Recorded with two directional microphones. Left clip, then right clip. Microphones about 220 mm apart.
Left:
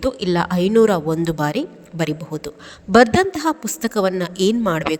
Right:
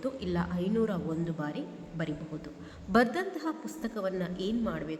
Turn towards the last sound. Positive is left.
turn(degrees=50)  # may be behind; listen again after turning